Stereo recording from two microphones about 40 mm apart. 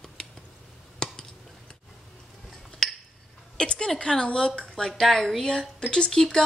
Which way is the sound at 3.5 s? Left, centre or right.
Left.